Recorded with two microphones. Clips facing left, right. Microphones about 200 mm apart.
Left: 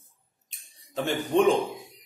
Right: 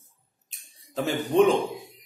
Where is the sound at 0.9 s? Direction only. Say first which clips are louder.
Right 1 dB; centre (ahead or behind).